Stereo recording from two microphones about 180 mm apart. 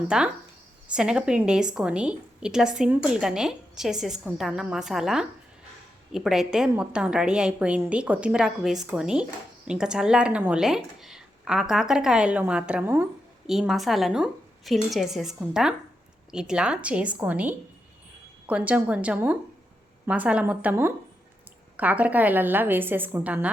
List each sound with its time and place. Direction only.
0.1 s a woman's voice: 5° right (ahead or behind)
13.5 s a woman's voice: centre (ahead or behind)